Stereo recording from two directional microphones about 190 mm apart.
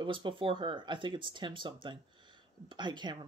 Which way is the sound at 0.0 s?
25° right (ahead or behind).